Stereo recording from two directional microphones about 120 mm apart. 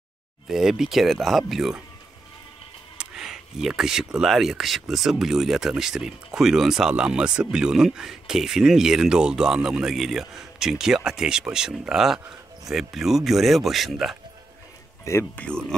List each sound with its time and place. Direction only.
0.5 s speech: 5° right (ahead or behind)
3.0 s speech: 5° right (ahead or behind)
15.0 s speech: 20° left (ahead or behind)